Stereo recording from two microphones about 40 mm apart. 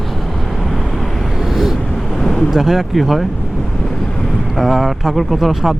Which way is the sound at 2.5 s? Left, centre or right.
Centre.